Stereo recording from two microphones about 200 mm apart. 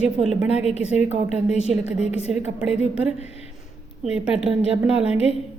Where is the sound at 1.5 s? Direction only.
35° left (ahead or behind).